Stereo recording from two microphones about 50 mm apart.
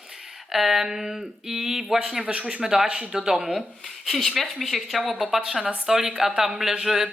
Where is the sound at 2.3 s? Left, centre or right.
Right.